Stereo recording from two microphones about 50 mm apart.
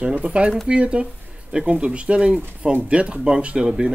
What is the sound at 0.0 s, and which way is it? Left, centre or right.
Speech, right.